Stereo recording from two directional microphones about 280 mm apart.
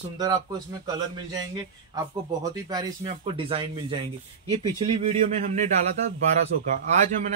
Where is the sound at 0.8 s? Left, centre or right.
Centre.